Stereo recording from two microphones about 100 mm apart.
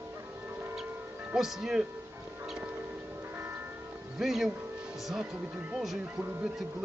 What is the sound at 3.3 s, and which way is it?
Church bell, 25° right (ahead or behind).